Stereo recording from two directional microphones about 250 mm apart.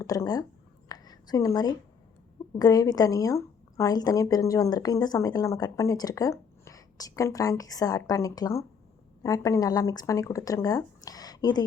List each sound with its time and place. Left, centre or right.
0.0 s a woman's voice: centre
0.9 s a sound: centre
2.6 s a woman's voice: centre